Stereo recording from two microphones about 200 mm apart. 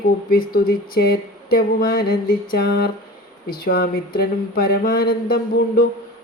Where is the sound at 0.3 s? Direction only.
45° left (ahead or behind).